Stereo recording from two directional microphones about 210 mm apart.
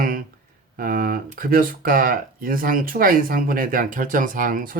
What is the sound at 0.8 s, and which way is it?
Speech, 40° right (ahead or behind).